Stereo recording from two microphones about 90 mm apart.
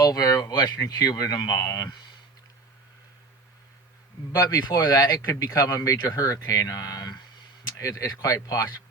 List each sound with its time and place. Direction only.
0.0 s speech: 40° left (ahead or behind)
4.3 s speech: 40° left (ahead or behind)